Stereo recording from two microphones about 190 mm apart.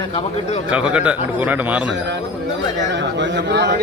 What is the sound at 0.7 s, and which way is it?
Speech, 5° right (ahead or behind).